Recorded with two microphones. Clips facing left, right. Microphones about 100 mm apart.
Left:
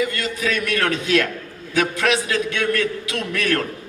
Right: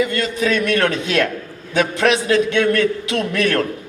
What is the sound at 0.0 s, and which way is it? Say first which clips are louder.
A man's voice: right 4 dB; 30° right (ahead or behind).